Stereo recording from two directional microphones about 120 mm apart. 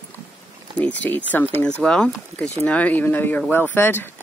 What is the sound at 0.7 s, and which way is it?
Speech, 10° left (ahead or behind).